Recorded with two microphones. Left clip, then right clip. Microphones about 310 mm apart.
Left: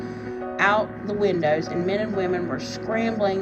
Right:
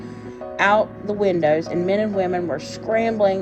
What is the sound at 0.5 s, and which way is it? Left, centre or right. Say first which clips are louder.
Music: right 3 dB; right.